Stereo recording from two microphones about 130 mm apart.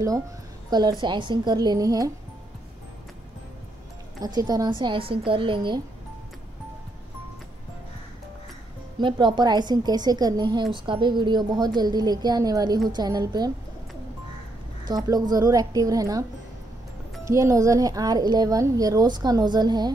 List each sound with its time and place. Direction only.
0.7 s a woman's voice: 30° right (ahead or behind)
4.2 s a woman's voice: 30° right (ahead or behind)
9.0 s a woman's voice: 35° right (ahead or behind)
14.9 s a woman's voice: 30° right (ahead or behind)
17.3 s a woman's voice: 25° right (ahead or behind)